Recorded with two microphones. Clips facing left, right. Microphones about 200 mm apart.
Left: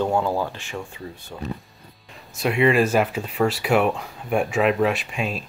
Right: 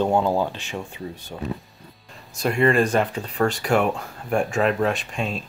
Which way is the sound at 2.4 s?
5° left (ahead or behind).